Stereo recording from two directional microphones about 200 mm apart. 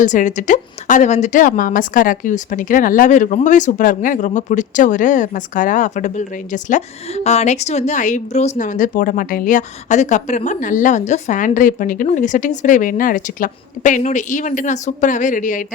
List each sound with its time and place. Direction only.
0.0 s speech: 40° left (ahead or behind)